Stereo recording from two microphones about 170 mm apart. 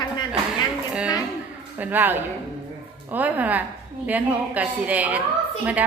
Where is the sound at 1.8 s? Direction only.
10° right (ahead or behind).